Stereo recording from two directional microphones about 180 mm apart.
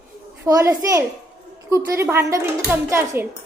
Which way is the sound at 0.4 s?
15° right (ahead or behind).